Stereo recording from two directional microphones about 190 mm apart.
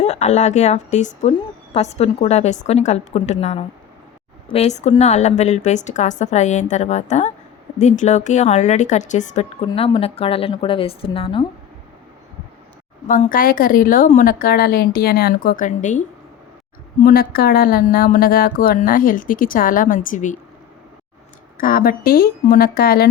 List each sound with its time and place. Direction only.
0.0 s a woman's voice: 35° left (ahead or behind)
13.1 s a woman's voice: 45° left (ahead or behind)
21.6 s a woman's voice: 50° left (ahead or behind)